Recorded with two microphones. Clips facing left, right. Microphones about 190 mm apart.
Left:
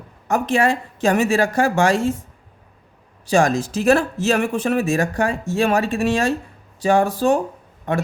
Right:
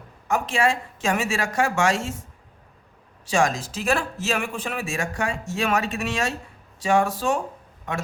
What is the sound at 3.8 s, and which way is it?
A man's voice, 40° left (ahead or behind).